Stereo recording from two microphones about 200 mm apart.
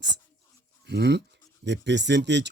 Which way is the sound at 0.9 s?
55° right (ahead or behind).